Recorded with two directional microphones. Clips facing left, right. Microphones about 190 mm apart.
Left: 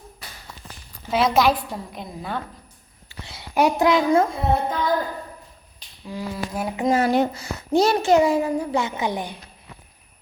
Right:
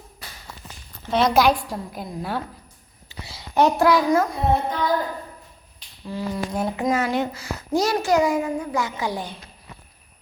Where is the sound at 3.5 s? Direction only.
10° left (ahead or behind).